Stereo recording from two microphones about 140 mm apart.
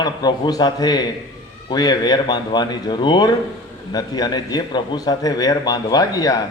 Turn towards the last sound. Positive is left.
turn(degrees=25)  # may be behind; listen again after turning